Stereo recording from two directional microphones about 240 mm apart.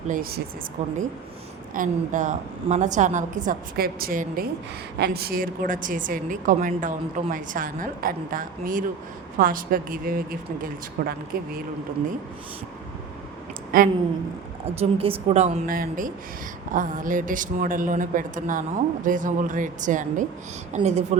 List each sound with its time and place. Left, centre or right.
0.1 s a woman's voice: right
13.7 s a woman's voice: right
14.8 s a woman's voice: right